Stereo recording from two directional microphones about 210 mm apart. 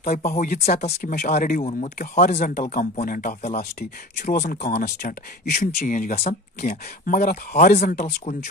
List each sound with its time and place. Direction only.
0.1 s speech: 35° left (ahead or behind)
1.6 s speech: 35° left (ahead or behind)